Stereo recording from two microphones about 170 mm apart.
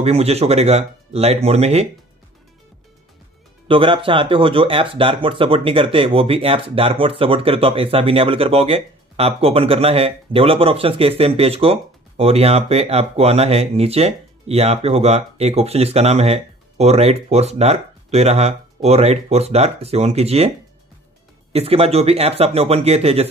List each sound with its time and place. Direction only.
0.0 s speech: 40° right (ahead or behind)
3.6 s speech: 30° right (ahead or behind)